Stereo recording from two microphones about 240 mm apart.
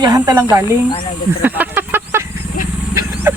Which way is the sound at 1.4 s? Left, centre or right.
Centre.